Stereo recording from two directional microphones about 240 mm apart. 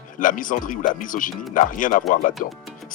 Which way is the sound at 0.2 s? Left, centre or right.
Left.